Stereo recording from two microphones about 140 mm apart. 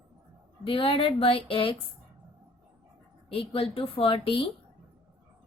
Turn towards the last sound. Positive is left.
turn(degrees=40)  # may be behind; listen again after turning